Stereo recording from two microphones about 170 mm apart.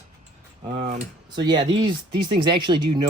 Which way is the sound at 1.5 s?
25° right (ahead or behind).